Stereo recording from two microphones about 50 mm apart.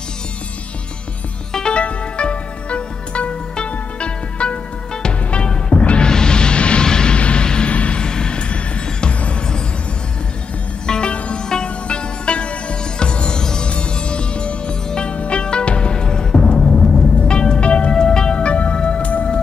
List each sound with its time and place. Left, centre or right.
1.5 s music: centre
10.9 s music: centre
17.2 s music: centre